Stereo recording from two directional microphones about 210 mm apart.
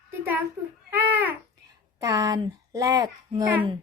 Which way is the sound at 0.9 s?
10° right (ahead or behind).